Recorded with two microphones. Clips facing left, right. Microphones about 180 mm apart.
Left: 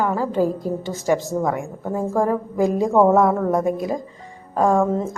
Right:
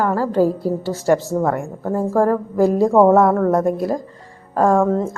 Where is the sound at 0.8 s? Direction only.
15° left (ahead or behind).